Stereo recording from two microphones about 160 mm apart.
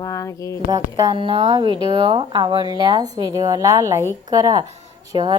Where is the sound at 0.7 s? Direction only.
25° right (ahead or behind).